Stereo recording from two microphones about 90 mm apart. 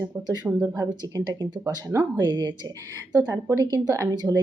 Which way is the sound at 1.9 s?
20° right (ahead or behind).